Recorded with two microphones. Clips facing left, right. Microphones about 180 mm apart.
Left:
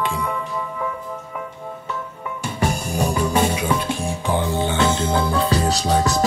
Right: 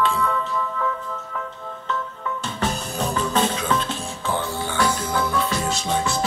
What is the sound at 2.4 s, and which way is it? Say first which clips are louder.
Music: left 5 dB; 10° left (ahead or behind).